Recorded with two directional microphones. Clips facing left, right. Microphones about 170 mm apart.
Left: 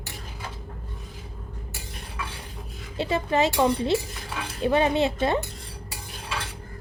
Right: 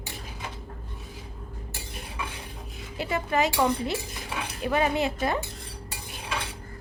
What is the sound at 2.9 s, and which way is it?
A woman's voice, 25° left (ahead or behind).